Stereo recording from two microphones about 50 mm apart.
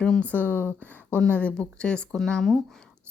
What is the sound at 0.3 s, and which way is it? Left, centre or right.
Speech, left.